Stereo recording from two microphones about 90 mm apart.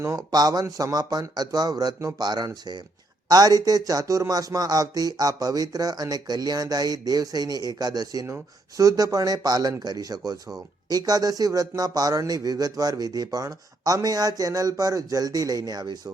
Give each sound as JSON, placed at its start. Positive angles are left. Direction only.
{"t": 0.0, "sound": "speech", "side_deg": -30}
{"t": 0.3, "sound": "a man's voice", "side_deg": -45}